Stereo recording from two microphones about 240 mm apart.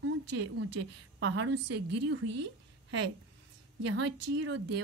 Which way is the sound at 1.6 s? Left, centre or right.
Right.